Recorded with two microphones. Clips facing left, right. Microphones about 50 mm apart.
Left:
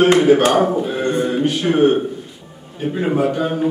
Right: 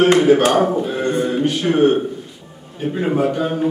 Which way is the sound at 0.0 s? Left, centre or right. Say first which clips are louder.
Even; centre.